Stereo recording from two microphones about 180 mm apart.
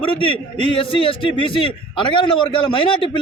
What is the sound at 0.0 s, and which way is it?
A man's voice, 30° left (ahead or behind).